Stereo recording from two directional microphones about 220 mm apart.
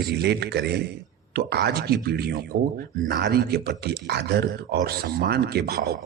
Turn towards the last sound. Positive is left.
turn(degrees=-45)  # may be behind; listen again after turning